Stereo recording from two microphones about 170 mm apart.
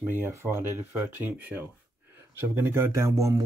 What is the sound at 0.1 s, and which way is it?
Speech, 15° right (ahead or behind).